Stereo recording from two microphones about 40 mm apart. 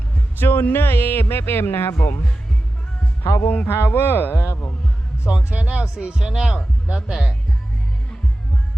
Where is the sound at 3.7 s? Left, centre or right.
Left.